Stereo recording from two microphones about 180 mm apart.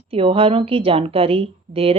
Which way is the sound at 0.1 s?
30° right (ahead or behind).